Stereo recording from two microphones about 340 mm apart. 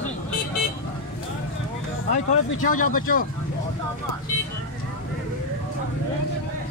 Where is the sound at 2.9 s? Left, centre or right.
Left.